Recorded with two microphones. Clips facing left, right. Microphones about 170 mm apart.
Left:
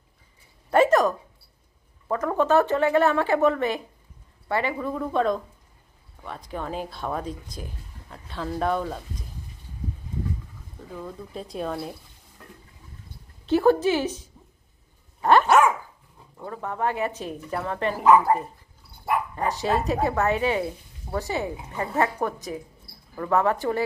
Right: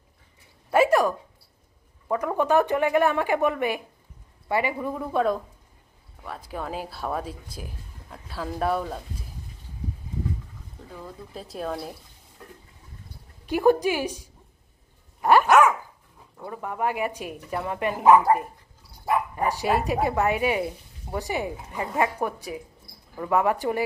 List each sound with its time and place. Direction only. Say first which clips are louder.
0.7 s speech: left 1 dB; 10° right (ahead or behind)
10.8 s speech: left 4 dB; centre (ahead or behind)
13.5 s speech: left 1 dB; 15° right (ahead or behind)
15.2 s dog: even; 10° right (ahead or behind)
16.4 s speech: even; 10° right (ahead or behind)
19.3 s speech: right 1 dB; 10° right (ahead or behind)